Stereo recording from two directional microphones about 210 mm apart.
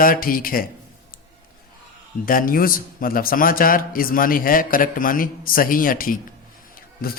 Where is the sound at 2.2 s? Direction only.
40° left (ahead or behind).